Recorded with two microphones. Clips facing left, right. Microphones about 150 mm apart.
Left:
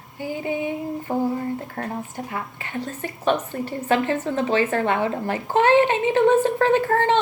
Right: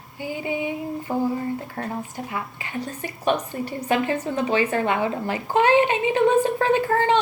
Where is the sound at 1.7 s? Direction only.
25° left (ahead or behind).